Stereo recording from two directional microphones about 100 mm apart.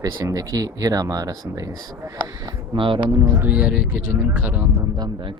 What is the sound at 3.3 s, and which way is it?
Speech, 20° right (ahead or behind).